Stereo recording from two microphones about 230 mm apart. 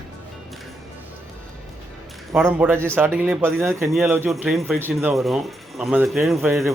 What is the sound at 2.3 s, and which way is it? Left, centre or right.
A man's voice, centre.